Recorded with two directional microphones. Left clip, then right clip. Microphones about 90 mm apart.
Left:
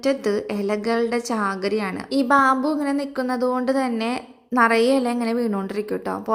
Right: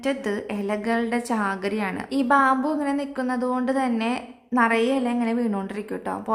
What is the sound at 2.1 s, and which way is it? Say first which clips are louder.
A woman's voice: left 2 dB; 45° left (ahead or behind).